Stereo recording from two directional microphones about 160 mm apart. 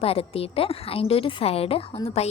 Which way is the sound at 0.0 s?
40° left (ahead or behind).